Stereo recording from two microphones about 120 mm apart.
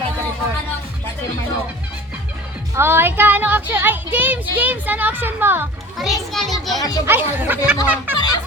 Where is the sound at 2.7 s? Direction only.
20° right (ahead or behind).